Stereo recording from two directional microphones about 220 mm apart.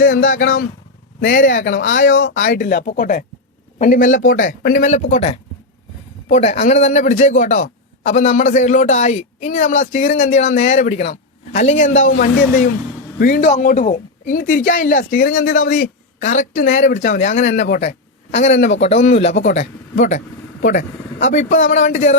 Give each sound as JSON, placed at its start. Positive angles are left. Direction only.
{"t": 0.0, "sound": "a man's voice", "side_deg": 40}